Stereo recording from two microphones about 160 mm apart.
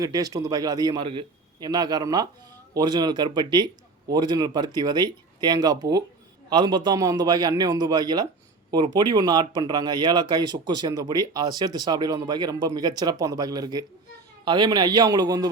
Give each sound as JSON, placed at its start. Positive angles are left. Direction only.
{"t": 0.0, "sound": "speech", "side_deg": -25}